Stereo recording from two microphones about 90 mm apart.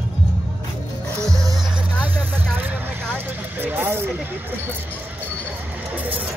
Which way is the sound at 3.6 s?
25° right (ahead or behind).